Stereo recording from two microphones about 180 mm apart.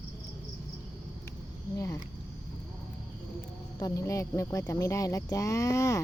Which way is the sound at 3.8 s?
15° left (ahead or behind).